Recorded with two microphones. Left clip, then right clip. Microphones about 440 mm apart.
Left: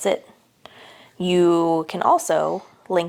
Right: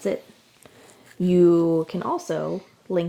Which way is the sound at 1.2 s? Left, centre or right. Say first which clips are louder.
Even; left.